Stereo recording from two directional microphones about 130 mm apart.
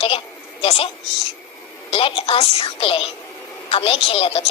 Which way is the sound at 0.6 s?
45° left (ahead or behind).